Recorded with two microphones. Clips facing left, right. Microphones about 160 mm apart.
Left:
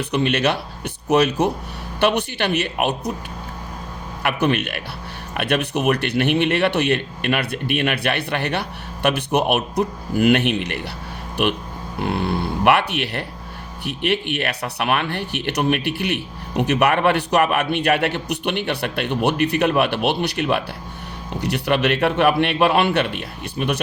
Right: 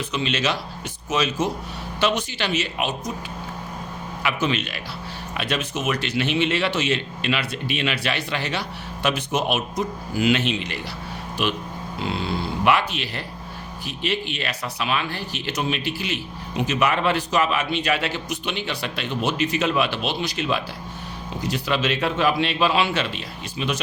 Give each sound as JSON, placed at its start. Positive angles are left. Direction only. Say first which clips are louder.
{"t": 0.0, "sound": "speech", "louder": "left 5 dB", "side_deg": 60}
{"t": 4.2, "sound": "speech", "louder": "left 4 dB", "side_deg": 55}